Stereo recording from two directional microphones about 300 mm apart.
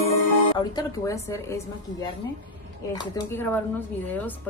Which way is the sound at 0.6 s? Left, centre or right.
Centre.